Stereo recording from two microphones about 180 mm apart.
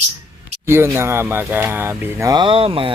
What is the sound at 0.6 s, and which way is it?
Speech, 15° right (ahead or behind).